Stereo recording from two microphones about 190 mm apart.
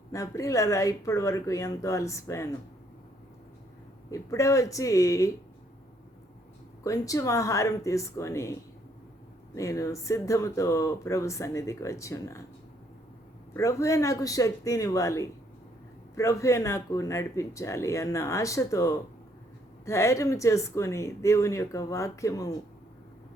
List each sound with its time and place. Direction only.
0.1 s speech: 15° left (ahead or behind)
4.1 s speech: 15° left (ahead or behind)
6.8 s speech: 15° left (ahead or behind)
9.6 s speech: 15° left (ahead or behind)
13.5 s speech: 15° left (ahead or behind)